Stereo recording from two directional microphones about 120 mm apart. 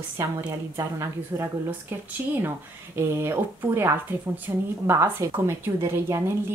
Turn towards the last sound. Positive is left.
turn(degrees=-20)  # may be behind; listen again after turning